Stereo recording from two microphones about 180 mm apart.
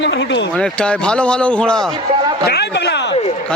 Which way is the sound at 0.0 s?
80° left.